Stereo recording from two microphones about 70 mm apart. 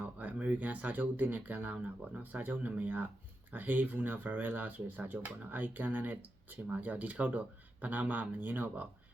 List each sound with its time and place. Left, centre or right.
0.0 s speech: right